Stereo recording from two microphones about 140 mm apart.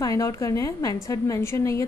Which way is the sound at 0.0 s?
25° left (ahead or behind).